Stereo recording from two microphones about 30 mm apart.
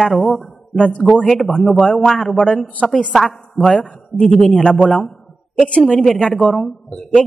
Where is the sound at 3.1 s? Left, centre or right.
Centre.